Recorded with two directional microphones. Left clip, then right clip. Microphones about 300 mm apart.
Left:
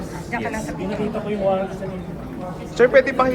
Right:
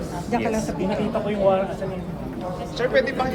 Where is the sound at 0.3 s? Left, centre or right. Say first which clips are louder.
Right 2 dB; centre.